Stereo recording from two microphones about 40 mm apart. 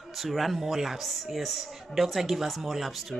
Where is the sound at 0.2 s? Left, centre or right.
Centre.